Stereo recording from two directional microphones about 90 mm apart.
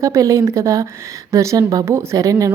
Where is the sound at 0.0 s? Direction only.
40° right (ahead or behind).